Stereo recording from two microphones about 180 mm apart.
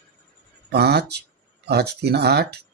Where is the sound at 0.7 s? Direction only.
65° right (ahead or behind).